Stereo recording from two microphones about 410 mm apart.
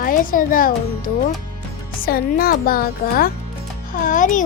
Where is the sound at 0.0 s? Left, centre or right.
Centre.